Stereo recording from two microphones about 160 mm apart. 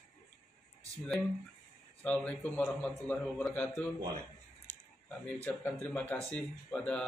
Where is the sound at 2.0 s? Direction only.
10° left (ahead or behind).